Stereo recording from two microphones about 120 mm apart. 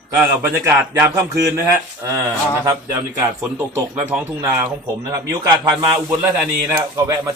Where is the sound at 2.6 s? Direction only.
30° right (ahead or behind).